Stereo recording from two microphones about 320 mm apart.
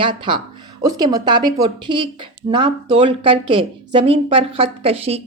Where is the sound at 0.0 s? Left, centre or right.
Centre.